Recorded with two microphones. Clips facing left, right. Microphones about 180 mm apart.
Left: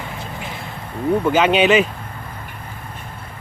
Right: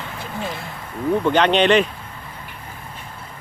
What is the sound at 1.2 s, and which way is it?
Speech, 5° left (ahead or behind).